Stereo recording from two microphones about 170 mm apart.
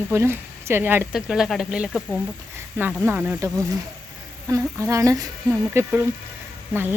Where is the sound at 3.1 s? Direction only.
10° right (ahead or behind).